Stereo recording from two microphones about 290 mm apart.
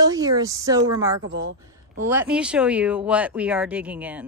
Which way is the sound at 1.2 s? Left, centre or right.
Right.